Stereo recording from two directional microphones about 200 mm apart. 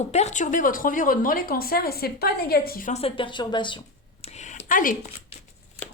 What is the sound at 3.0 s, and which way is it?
Speech, 25° left (ahead or behind).